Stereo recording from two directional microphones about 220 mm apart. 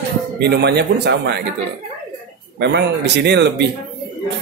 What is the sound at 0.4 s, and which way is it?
A woman's voice, 50° right (ahead or behind).